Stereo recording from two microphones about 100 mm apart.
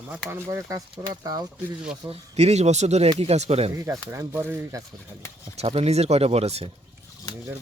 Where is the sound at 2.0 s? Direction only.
90° right.